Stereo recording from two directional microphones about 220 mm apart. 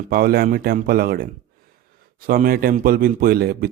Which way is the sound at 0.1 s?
45° right (ahead or behind).